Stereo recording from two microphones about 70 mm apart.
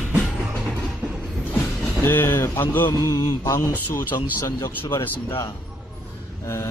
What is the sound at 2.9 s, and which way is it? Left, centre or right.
Mantra, left.